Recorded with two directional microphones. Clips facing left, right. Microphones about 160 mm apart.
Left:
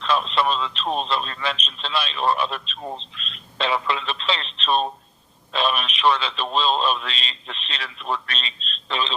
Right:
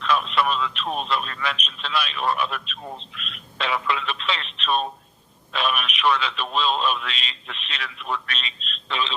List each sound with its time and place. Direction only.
0.0 s speech: 30° left (ahead or behind)